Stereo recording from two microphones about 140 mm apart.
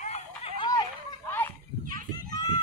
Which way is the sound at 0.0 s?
50° left (ahead or behind).